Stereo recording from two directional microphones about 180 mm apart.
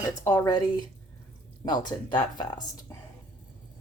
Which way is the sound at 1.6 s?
25° left (ahead or behind).